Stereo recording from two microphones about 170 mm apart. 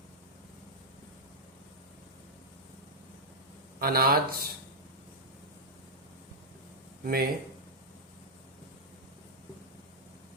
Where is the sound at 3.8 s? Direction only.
60° right (ahead or behind).